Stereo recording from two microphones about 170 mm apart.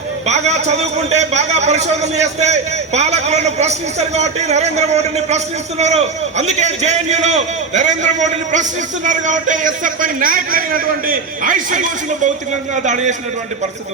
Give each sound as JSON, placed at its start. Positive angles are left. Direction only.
{"t": 0.3, "sound": "a man's voice", "side_deg": -40}